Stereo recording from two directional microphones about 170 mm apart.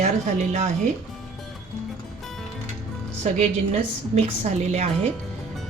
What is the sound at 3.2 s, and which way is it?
A woman's voice, 40° right (ahead or behind).